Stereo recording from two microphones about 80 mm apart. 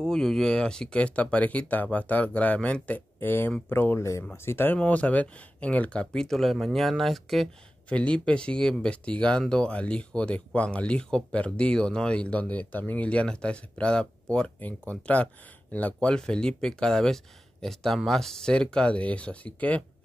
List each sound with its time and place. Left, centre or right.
0.0 s speech: centre; by 4.7 s left
4.7 s speech: centre
7.9 s speech: centre